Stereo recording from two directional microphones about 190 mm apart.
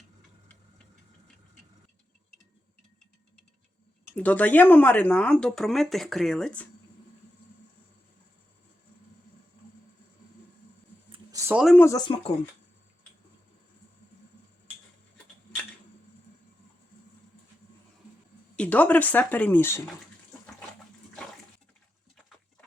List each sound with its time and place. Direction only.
4.1 s speech: 10° left (ahead or behind)
11.1 s a sound: 20° right (ahead or behind)
11.5 s speech: centre (ahead or behind)
11.8 s speech: 20° left (ahead or behind)
18.5 s speech: 5° left (ahead or behind)